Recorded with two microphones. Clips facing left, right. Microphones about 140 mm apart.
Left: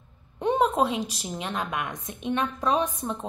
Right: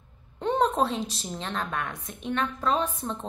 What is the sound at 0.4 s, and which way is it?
A woman's voice, 10° left (ahead or behind).